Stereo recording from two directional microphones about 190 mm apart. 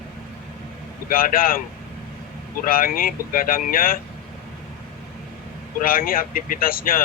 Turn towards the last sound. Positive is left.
turn(degrees=50)  # may be behind; listen again after turning